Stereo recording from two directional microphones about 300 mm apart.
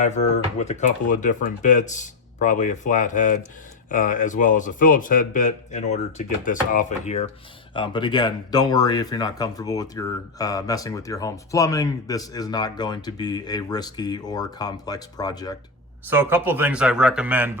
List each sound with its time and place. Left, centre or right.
0.0 s speech: left
16.0 s speech: centre